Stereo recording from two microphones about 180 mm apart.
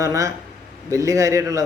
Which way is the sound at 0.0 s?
20° right (ahead or behind).